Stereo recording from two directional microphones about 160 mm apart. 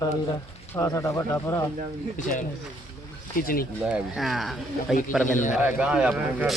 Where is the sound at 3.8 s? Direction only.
5° right (ahead or behind).